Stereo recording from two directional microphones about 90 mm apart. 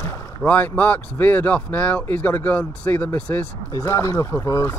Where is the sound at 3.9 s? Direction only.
35° left (ahead or behind).